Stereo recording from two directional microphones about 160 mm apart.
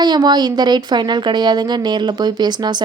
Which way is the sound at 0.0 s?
25° right (ahead or behind).